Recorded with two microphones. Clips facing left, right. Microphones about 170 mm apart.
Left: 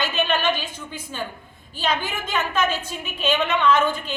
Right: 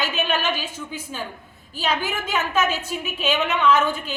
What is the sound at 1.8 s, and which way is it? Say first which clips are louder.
A woman's voice: even; 5° right (ahead or behind).